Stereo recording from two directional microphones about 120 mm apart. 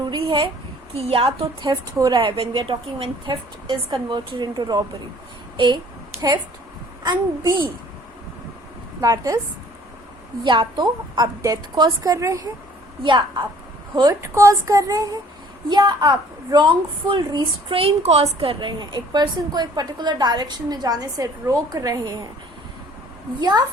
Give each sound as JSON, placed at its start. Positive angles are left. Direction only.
{"t": 0.0, "sound": "a woman's voice", "side_deg": -40}
{"t": 7.0, "sound": "a woman's voice", "side_deg": -35}
{"t": 9.0, "sound": "speech", "side_deg": -30}
{"t": 10.4, "sound": "a woman's voice", "side_deg": -40}
{"t": 13.0, "sound": "a woman's voice", "side_deg": -45}
{"t": 14.2, "sound": "a woman's voice", "side_deg": -25}
{"t": 18.3, "sound": "a woman's voice", "side_deg": -45}
{"t": 23.4, "sound": "a woman's voice", "side_deg": -35}